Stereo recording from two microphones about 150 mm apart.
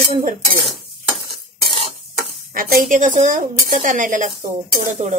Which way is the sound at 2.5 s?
65° right (ahead or behind).